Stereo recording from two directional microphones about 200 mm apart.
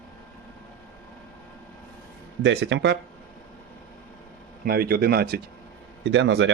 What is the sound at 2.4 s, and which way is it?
Speech, 65° right (ahead or behind).